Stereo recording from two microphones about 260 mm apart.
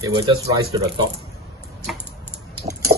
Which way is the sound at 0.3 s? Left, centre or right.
Centre.